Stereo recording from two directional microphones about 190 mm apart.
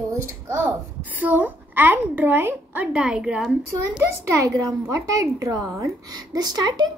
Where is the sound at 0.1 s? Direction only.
15° right (ahead or behind).